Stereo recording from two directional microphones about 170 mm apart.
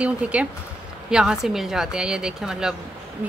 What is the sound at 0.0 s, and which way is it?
A woman's voice, 5° right (ahead or behind).